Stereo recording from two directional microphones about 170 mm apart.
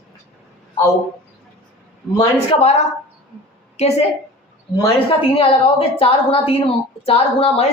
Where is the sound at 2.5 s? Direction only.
40° left (ahead or behind).